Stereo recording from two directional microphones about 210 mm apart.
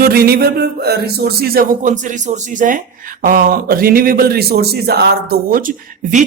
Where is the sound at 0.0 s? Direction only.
45° right (ahead or behind).